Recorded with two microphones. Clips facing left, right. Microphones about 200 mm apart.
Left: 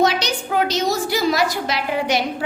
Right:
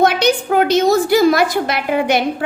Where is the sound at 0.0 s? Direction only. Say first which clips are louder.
Right 5 dB; 55° right (ahead or behind).